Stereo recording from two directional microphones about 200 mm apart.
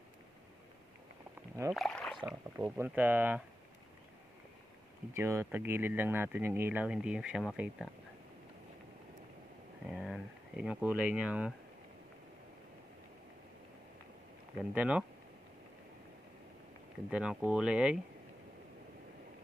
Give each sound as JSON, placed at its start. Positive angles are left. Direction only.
{"t": 1.7, "sound": "speech", "side_deg": 0}
{"t": 2.2, "sound": "speech", "side_deg": -10}
{"t": 5.1, "sound": "speech", "side_deg": -15}
{"t": 9.8, "sound": "speech", "side_deg": 0}
{"t": 14.6, "sound": "speech", "side_deg": -5}
{"t": 17.1, "sound": "speech", "side_deg": -5}